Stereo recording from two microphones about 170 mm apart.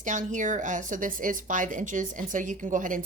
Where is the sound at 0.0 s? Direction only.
45° right (ahead or behind).